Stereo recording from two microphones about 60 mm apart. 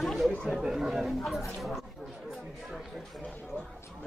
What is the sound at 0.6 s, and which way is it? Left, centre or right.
Speech, centre.